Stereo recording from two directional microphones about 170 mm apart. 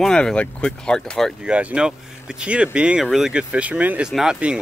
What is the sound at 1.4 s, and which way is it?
Speech, 5° right (ahead or behind).